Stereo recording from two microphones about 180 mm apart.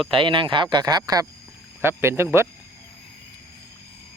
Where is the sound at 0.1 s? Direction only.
30° right (ahead or behind).